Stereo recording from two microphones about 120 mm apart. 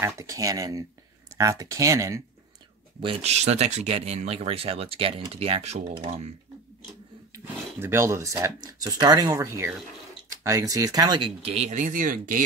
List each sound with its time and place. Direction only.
0.0 s speech: 25° right (ahead or behind)
3.0 s speech: 55° right (ahead or behind)
7.3 s speech: 20° right (ahead or behind); by 11.3 s 40° right (ahead or behind)
11.4 s speech: 65° right (ahead or behind); by 12.4 s 90° right